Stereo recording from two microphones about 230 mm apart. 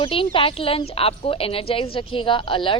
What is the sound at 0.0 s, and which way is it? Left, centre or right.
A woman's voice, left.